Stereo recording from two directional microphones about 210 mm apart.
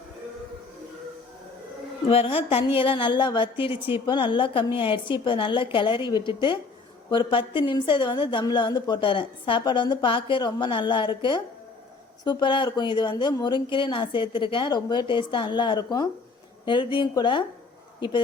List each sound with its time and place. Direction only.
2.0 s a woman's voice: 25° left (ahead or behind)
3.8 s a woman's voice: 10° right (ahead or behind)
4.0 s a woman's voice: 20° left (ahead or behind)